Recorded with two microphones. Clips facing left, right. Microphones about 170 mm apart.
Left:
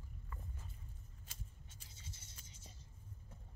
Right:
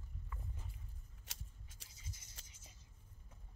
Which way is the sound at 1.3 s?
75° right (ahead or behind).